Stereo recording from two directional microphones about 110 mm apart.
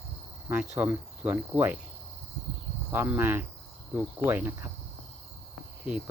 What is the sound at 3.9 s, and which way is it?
Cricket, 20° right (ahead or behind).